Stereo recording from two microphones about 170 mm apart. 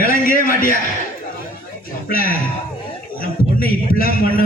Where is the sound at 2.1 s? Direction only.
60° left (ahead or behind).